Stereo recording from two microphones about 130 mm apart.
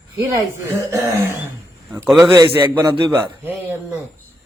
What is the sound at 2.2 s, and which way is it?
A man's voice, 25° right (ahead or behind).